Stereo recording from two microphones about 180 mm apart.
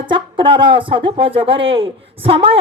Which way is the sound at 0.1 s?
25° right (ahead or behind).